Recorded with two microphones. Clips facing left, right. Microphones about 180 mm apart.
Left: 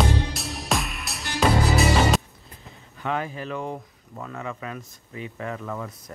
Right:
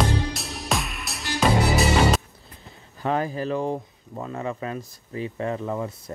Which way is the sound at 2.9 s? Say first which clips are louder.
Right 4 dB; 35° right (ahead or behind).